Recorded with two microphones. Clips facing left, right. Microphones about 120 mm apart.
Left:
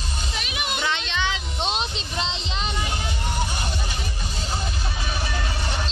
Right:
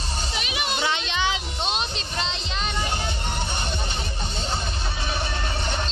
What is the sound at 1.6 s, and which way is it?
Music, 25° left (ahead or behind).